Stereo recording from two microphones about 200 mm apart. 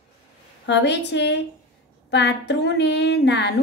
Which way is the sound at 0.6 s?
60° left (ahead or behind).